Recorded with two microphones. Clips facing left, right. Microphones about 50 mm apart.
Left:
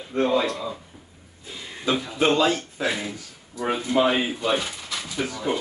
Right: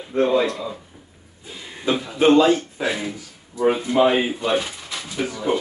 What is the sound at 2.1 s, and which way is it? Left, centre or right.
Speech, centre.